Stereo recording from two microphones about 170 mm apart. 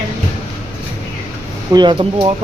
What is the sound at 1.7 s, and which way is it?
Speech, 25° right (ahead or behind).